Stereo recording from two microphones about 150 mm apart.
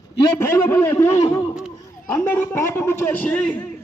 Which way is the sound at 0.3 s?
20° left (ahead or behind).